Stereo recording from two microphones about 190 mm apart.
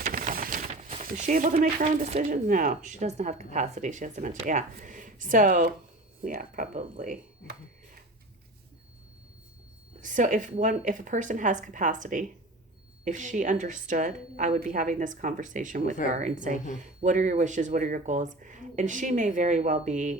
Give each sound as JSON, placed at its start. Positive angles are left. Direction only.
{"t": 0.0, "sound": "a woman's voice", "side_deg": -45}
{"t": 10.0, "sound": "a woman's voice", "side_deg": -40}